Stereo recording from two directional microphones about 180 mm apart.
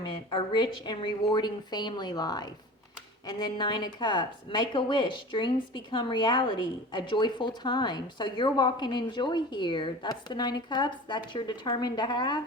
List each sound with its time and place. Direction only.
0.3 s a woman's voice: 25° left (ahead or behind)